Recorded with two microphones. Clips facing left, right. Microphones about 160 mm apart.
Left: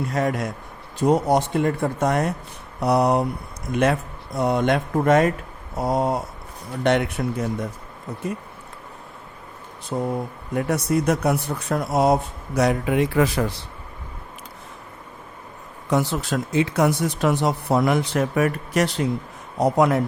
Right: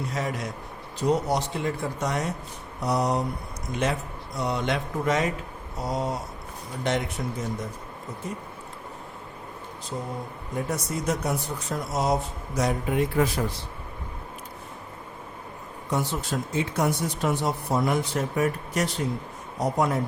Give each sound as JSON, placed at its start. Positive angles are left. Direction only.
{"t": 0.1, "sound": "speech", "side_deg": 55}
{"t": 9.9, "sound": "speech", "side_deg": 60}
{"t": 15.9, "sound": "speech", "side_deg": 90}